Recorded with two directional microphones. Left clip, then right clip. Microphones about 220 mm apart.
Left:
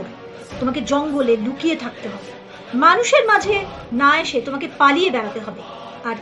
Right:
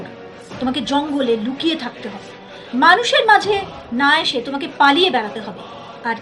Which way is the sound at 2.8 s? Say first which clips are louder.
Right 1 dB; 10° right (ahead or behind).